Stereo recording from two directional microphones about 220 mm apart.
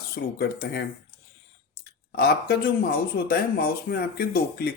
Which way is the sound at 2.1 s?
45° left (ahead or behind).